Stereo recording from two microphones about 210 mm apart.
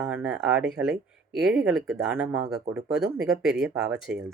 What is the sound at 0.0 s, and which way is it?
Speech, 5° right (ahead or behind).